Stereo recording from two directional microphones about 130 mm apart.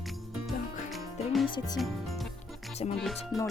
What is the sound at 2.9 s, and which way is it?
Music, centre (ahead or behind).